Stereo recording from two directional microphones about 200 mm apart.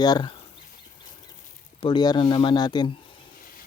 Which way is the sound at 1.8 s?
20° left (ahead or behind).